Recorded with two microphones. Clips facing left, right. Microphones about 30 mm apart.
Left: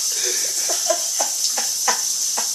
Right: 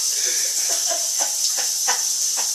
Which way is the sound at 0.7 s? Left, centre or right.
Centre.